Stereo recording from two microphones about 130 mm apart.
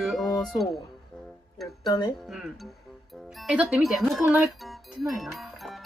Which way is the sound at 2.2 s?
5° right (ahead or behind).